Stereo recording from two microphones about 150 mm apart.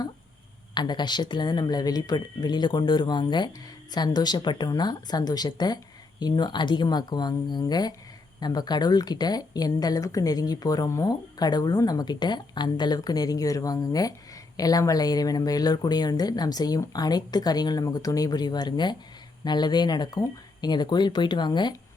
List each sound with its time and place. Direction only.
0.7 s speech: 30° left (ahead or behind)